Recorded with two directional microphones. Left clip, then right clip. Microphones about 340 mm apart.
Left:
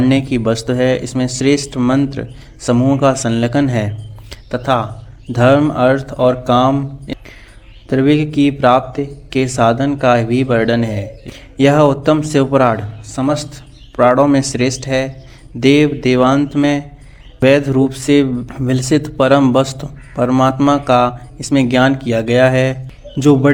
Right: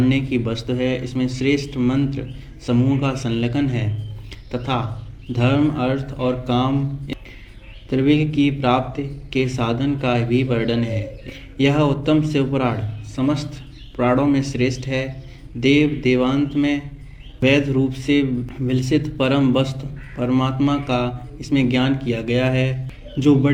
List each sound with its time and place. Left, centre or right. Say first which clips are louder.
0.0 s speech: left 6 dB; left
4.3 s music: left 9 dB; left
5.3 s speech: left 9 dB; left